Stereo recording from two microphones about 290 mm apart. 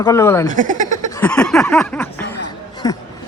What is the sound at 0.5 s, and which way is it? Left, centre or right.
Speech, right.